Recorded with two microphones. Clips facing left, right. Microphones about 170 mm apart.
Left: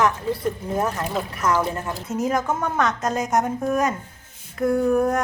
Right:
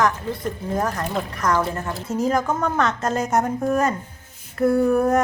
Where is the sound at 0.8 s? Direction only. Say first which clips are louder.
Right 3 dB; 5° left (ahead or behind).